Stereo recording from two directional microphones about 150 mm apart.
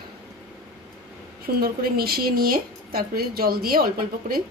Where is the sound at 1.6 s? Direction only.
90° right.